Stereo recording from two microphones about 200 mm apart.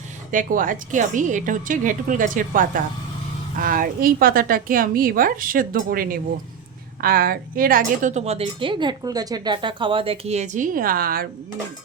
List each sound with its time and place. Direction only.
0.3 s a woman's voice: 40° right (ahead or behind)